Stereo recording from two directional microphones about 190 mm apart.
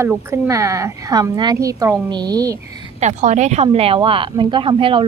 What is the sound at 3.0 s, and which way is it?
Speech, 40° right (ahead or behind).